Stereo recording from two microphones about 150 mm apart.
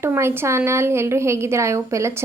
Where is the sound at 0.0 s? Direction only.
15° right (ahead or behind).